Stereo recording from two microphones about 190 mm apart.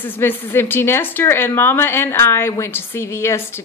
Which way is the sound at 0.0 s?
10° left (ahead or behind).